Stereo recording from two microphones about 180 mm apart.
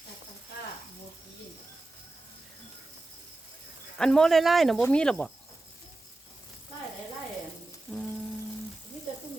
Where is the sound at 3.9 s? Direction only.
5° left (ahead or behind).